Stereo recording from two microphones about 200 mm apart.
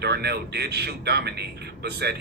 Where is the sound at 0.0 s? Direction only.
55° right (ahead or behind).